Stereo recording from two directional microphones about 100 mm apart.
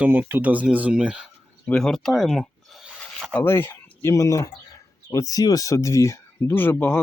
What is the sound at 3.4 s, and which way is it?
Speech, 25° left (ahead or behind).